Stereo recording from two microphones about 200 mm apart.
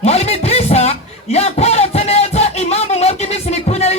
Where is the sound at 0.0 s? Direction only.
30° left (ahead or behind).